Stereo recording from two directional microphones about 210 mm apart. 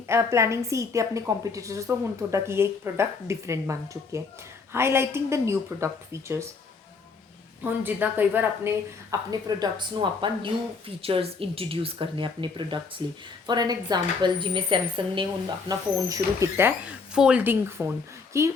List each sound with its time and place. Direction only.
0.1 s a woman's voice: 15° right (ahead or behind)
7.6 s a woman's voice: 10° right (ahead or behind)